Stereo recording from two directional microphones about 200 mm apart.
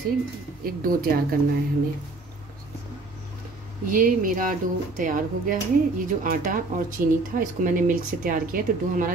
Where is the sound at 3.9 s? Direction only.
45° right (ahead or behind).